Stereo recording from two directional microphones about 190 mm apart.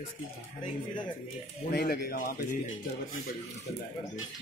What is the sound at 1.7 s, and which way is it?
Speech, 55° left (ahead or behind).